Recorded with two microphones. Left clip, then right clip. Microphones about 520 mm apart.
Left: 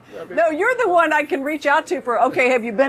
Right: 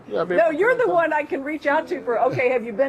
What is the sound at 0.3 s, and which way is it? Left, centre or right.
A woman's voice, left.